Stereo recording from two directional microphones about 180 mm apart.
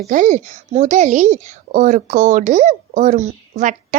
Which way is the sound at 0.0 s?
45° right (ahead or behind).